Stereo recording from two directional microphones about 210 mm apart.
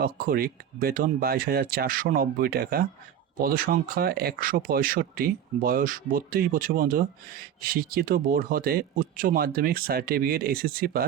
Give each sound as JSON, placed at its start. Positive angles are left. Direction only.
{"t": 0.0, "sound": "speech", "side_deg": -45}